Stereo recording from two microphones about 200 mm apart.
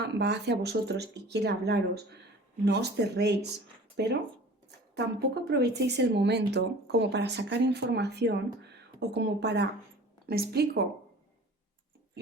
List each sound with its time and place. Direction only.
0.0 s speech: 55° right (ahead or behind)